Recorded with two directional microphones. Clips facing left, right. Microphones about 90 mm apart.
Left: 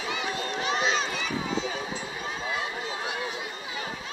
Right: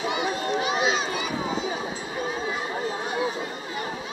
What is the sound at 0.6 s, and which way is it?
Run, 5° right (ahead or behind).